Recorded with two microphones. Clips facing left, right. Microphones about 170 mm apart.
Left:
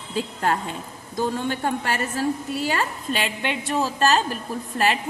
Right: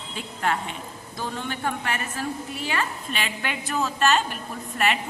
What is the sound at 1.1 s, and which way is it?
A woman's voice, 40° left (ahead or behind).